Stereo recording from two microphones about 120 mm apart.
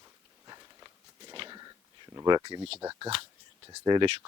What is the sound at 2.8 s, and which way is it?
Speech, 30° right (ahead or behind).